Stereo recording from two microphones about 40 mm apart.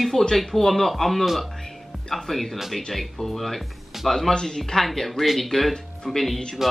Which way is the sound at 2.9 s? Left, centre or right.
Centre.